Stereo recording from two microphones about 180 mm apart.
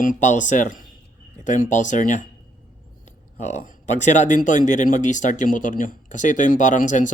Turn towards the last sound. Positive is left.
turn(degrees=45)  # may be behind; listen again after turning